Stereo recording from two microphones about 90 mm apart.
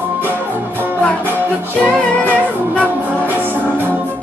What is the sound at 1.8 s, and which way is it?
Music, 15° left (ahead or behind).